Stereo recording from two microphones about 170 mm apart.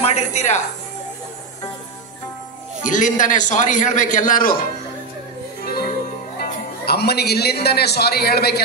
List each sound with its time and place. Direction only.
0.0 s a woman's voice: 40° left (ahead or behind)
2.8 s a man's voice: 50° left (ahead or behind)
4.3 s a man's voice: 55° left (ahead or behind)
6.4 s music: 70° left (ahead or behind)
7.6 s a man's voice: 70° left (ahead or behind)